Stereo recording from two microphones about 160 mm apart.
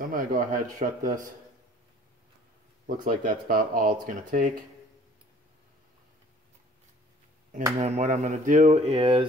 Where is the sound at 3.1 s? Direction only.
60° right (ahead or behind).